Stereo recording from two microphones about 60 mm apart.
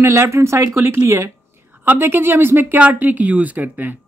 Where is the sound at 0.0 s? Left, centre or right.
Right.